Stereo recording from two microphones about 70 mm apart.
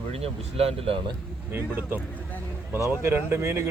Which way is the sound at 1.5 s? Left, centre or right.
Right.